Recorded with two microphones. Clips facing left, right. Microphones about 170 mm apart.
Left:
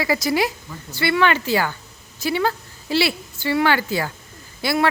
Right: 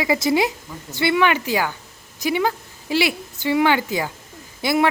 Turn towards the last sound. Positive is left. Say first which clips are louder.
# right 1 dB
turn(degrees=-20)  # may be behind; listen again after turning